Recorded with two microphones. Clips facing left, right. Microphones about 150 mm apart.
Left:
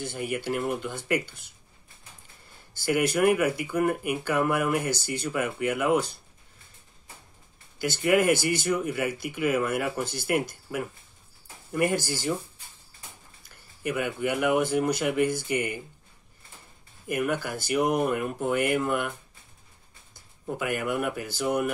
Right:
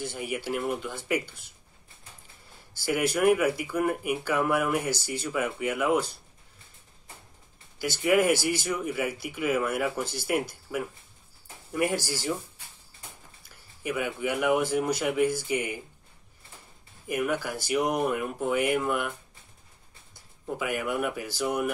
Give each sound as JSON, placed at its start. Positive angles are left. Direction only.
{"t": 0.0, "sound": "speech", "side_deg": -5}
{"t": 2.7, "sound": "speech", "side_deg": -5}
{"t": 7.8, "sound": "speech", "side_deg": -5}
{"t": 13.8, "sound": "speech", "side_deg": 0}
{"t": 17.1, "sound": "speech", "side_deg": -5}
{"t": 20.5, "sound": "speech", "side_deg": -5}